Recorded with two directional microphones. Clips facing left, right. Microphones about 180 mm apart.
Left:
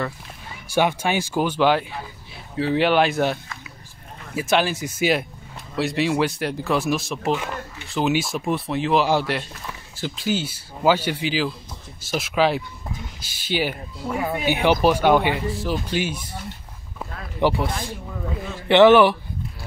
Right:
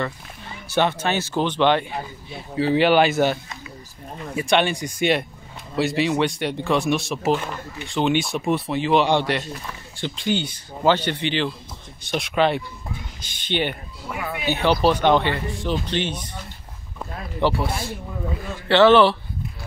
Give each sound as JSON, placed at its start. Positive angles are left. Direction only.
{"t": 0.7, "sound": "speech", "side_deg": 10}
{"t": 4.4, "sound": "speech", "side_deg": 0}
{"t": 14.0, "sound": "speech", "side_deg": 40}
{"t": 14.5, "sound": "speech", "side_deg": 15}
{"t": 17.4, "sound": "speech", "side_deg": 15}